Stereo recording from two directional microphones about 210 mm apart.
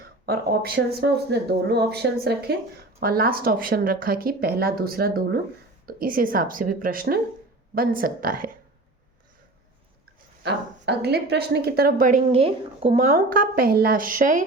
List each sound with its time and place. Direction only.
0.3 s speech: 45° right (ahead or behind)
10.4 s speech: 50° right (ahead or behind)